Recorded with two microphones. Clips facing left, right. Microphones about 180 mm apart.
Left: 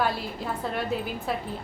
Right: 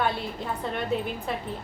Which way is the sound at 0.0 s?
Centre (ahead or behind).